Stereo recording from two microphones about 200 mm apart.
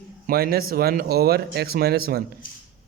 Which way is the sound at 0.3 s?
50° right (ahead or behind).